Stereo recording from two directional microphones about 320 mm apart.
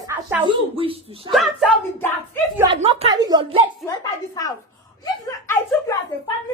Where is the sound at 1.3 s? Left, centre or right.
Centre.